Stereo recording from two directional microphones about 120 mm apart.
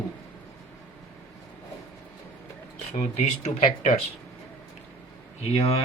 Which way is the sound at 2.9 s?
75° left (ahead or behind).